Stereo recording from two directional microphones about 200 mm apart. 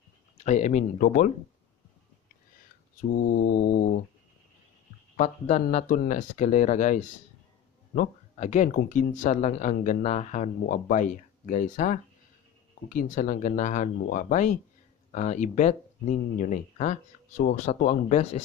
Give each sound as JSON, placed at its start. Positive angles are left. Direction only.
{"t": 0.4, "sound": "speech", "side_deg": 35}
{"t": 3.0, "sound": "mantra", "side_deg": 45}
{"t": 5.1, "sound": "speech", "side_deg": 35}